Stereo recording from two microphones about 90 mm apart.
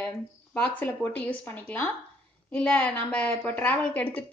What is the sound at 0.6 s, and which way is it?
A woman's voice, 20° left (ahead or behind).